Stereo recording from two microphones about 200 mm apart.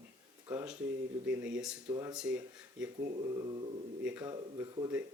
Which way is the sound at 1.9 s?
15° right (ahead or behind).